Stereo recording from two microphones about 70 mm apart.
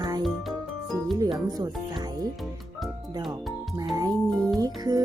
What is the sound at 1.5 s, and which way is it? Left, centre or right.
Speech, right.